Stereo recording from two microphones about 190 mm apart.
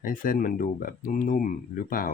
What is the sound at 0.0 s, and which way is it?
Speech, 45° left (ahead or behind).